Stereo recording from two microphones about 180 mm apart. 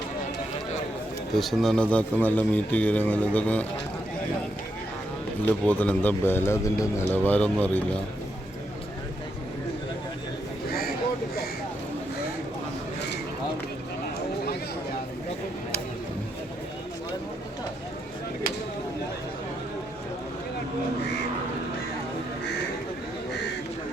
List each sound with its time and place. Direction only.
1.4 s speech: centre (ahead or behind)
5.5 s speech: 10° left (ahead or behind)
10.7 s a sound: 55° left (ahead or behind)